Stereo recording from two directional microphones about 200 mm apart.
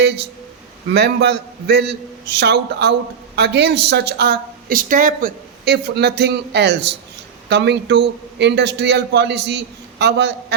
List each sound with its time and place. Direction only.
0.9 s speech: 55° right (ahead or behind)